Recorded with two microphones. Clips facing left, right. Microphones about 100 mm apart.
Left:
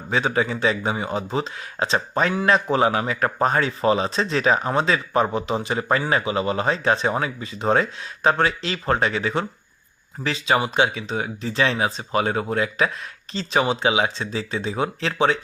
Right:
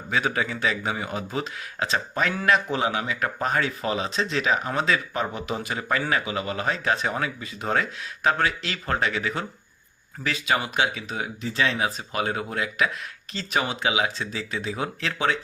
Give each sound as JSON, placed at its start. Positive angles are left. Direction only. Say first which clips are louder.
{"t": 0.1, "sound": "speech", "louder": "left 4 dB", "side_deg": 30}